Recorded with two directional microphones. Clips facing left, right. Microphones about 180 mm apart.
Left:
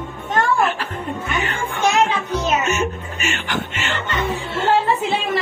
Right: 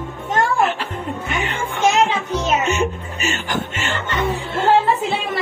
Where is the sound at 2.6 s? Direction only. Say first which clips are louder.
Right 1 dB; 35° right (ahead or behind).